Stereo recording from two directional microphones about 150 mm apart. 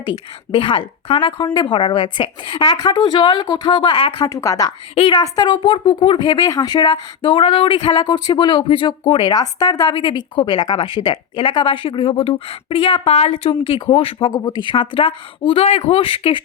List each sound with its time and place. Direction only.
0.0 s speech: 30° left (ahead or behind)
4.9 s speech: 35° left (ahead or behind)